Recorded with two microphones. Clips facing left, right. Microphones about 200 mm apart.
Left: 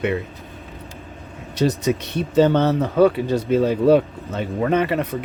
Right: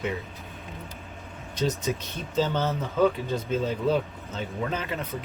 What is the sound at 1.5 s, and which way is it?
Speech, 75° left (ahead or behind).